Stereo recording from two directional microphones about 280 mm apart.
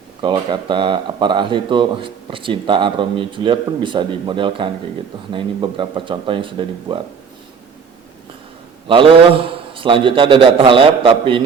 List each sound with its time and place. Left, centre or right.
0.2 s speech: centre
8.9 s a man's voice: centre